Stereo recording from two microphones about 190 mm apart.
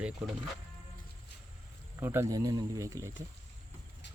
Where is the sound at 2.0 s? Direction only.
15° right (ahead or behind).